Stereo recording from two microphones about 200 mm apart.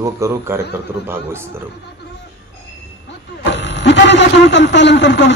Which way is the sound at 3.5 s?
60° left (ahead or behind).